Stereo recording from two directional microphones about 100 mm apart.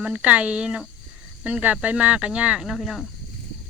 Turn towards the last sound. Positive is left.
turn(degrees=0)  # may be behind; listen again after turning